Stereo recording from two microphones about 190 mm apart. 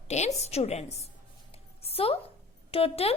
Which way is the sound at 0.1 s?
35° left (ahead or behind).